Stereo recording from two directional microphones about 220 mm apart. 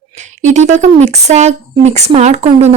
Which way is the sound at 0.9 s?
30° right (ahead or behind).